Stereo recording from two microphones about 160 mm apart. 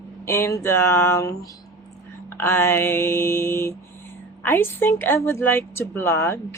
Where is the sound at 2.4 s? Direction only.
15° left (ahead or behind).